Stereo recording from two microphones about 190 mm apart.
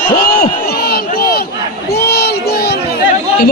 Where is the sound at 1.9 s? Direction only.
55° left (ahead or behind).